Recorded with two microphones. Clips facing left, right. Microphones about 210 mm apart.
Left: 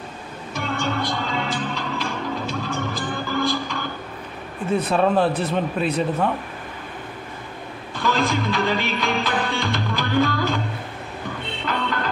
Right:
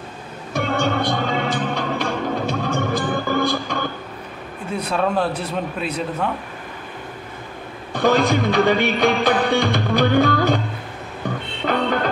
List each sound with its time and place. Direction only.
0.5 s music: 60° right (ahead or behind)
4.8 s a man's voice: 5° left (ahead or behind)
7.9 s music: 60° right (ahead or behind)
11.6 s music: 55° right (ahead or behind)